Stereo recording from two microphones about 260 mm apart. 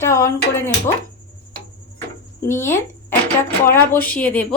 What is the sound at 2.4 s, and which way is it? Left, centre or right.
Speech, centre.